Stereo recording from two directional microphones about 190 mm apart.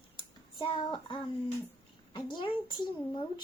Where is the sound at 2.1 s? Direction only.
25° left (ahead or behind).